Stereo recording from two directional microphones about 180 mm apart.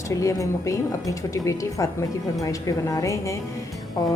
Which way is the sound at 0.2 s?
15° left (ahead or behind).